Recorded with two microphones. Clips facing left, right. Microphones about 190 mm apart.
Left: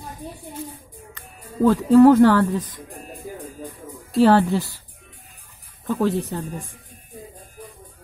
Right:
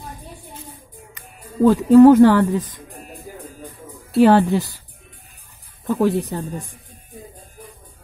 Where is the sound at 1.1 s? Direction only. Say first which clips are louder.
Right 3 dB; 15° right (ahead or behind).